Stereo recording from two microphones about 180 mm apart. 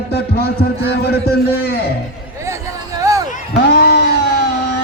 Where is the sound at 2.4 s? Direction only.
15° right (ahead or behind).